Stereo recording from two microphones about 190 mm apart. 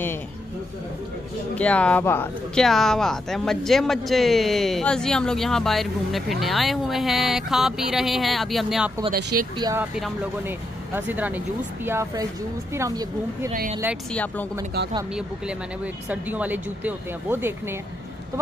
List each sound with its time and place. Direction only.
1.5 s speech: 5° left (ahead or behind)
9.3 s speech: 55° right (ahead or behind)
9.8 s speech: 5° right (ahead or behind)
13.5 s speech: 45° right (ahead or behind)
14.1 s speech: 10° left (ahead or behind)
15.1 s speech: 5° right (ahead or behind)